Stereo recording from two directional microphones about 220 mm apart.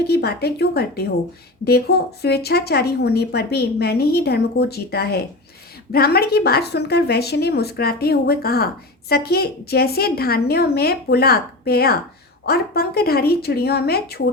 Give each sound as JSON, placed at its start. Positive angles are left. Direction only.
{"t": 0.1, "sound": "a woman's voice", "side_deg": 45}